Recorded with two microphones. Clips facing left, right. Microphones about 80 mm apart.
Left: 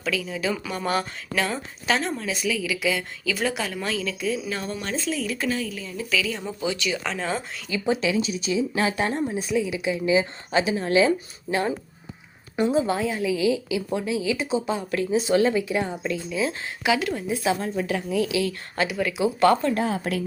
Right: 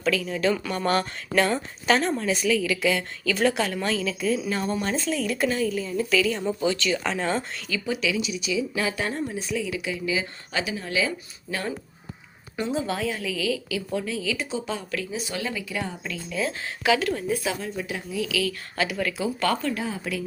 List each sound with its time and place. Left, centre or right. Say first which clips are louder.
0.0 s speech: right 3 dB; centre
6.7 s a woman's voice: right 1 dB; centre
7.0 s speech: right 2 dB; centre
7.7 s a woman's voice: left 4 dB; left
12.5 s a woman's voice: left 5 dB; centre
14.9 s a woman's voice: left 10 dB; left
17.4 s a woman's voice: left 5 dB; left
17.7 s a woman's voice: left 5 dB; left
18.3 s a woman's voice: left 2 dB; left
18.9 s a woman's voice: left 4 dB; centre
19.8 s speech: left 5 dB; left